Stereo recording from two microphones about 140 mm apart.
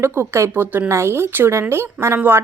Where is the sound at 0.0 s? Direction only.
15° right (ahead or behind).